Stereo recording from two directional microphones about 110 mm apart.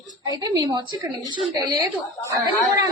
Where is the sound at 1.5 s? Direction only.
30° right (ahead or behind).